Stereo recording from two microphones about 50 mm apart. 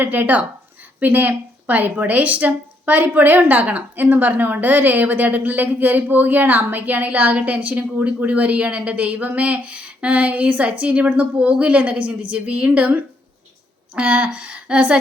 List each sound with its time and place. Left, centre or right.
0.0 s a woman's voice: right